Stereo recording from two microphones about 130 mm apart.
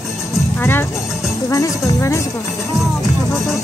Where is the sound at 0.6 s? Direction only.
15° left (ahead or behind).